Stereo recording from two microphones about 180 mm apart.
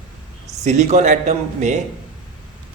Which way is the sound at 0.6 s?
40° right (ahead or behind).